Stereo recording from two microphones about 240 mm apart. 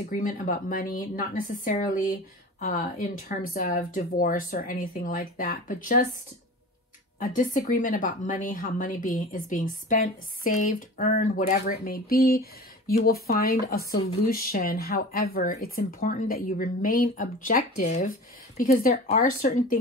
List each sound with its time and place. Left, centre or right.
0.1 s a woman's voice: left
7.2 s a woman's voice: left